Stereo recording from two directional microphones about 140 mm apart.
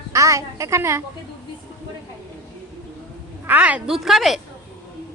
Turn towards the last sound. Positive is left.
turn(degrees=0)  # may be behind; listen again after turning